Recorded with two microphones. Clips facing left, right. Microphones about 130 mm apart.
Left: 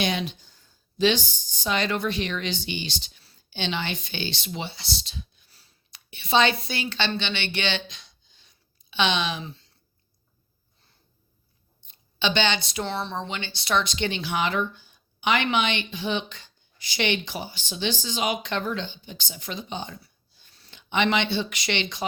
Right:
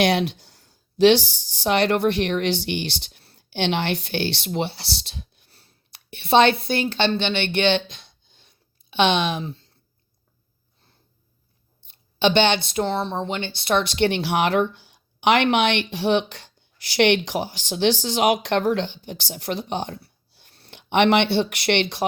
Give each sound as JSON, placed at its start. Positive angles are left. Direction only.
{"t": 0.0, "sound": "speech", "side_deg": -75}
{"t": 11.9, "sound": "speech", "side_deg": -60}